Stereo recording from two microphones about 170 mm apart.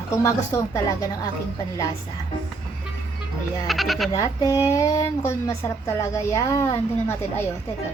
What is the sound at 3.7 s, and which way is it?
Speech, centre (ahead or behind).